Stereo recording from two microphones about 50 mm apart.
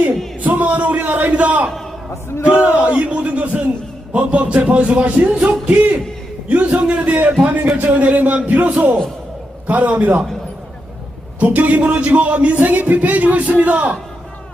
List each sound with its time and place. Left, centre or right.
0.4 s a sound: right
2.4 s a man's voice: right
11.3 s a man's voice: right